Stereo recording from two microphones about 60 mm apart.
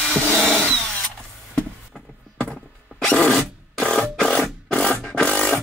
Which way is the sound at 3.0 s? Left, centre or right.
Left.